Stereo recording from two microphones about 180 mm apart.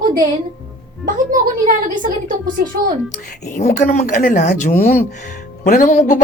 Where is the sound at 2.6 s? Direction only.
55° right (ahead or behind).